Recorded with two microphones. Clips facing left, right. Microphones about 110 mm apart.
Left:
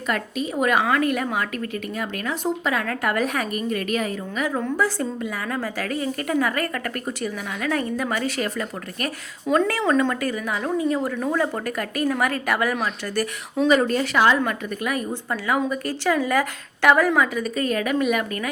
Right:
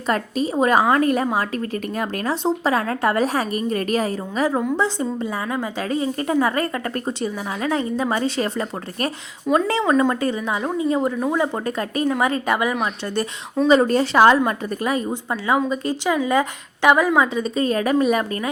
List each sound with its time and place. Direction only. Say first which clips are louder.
0.1 s a woman's voice: right 4 dB; 35° right (ahead or behind)
4.8 s a woman's voice: right 2 dB; 20° right (ahead or behind)
9.5 s a woman's voice: right 2 dB; centre (ahead or behind)
10.1 s a woman's voice: right 3 dB; 25° right (ahead or behind)
13.7 s a woman's voice: right 4 dB; 30° right (ahead or behind)